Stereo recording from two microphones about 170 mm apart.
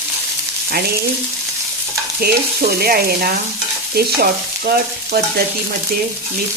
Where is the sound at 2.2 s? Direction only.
65° right (ahead or behind).